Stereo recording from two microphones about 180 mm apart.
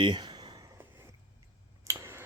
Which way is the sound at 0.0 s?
25° right (ahead or behind).